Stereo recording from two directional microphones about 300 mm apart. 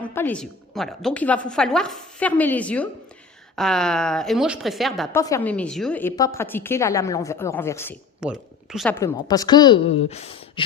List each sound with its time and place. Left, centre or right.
0.0 s a woman's voice: centre